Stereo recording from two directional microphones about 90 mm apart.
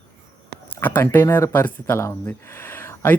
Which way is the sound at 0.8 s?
20° left (ahead or behind).